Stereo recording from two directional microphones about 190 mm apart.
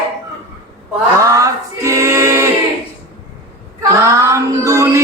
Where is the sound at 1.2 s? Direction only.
15° right (ahead or behind).